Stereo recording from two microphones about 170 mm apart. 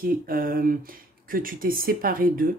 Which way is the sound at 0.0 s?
55° right (ahead or behind).